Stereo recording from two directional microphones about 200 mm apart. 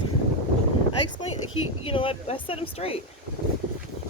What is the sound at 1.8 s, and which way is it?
Speech, 25° left (ahead or behind).